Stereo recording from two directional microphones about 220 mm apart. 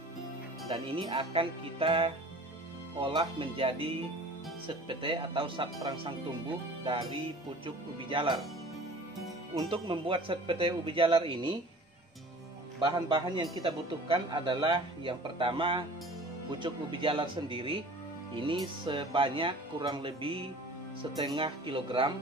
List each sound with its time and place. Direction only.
0.7 s a man's voice: 25° right (ahead or behind)
6.8 s music: 20° right (ahead or behind)
7.6 s a man's voice: 25° right (ahead or behind)
9.6 s a man's voice: 20° right (ahead or behind)
13.1 s a man's voice: 20° right (ahead or behind)